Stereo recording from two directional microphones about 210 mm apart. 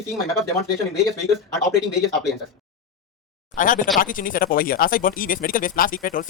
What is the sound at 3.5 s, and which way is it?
Speech, 40° left (ahead or behind).